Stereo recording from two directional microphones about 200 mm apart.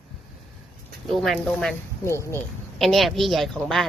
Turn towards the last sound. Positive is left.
turn(degrees=0)  # may be behind; listen again after turning